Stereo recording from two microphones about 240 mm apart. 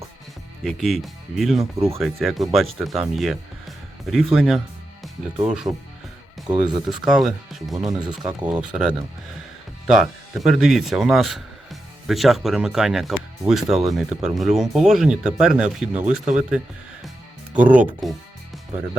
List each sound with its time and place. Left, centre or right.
0.6 s speech: centre
6.6 s speech: centre
7.9 s speech: centre
8.4 s speech: centre